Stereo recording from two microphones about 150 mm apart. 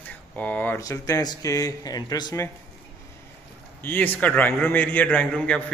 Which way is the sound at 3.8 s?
10° left (ahead or behind).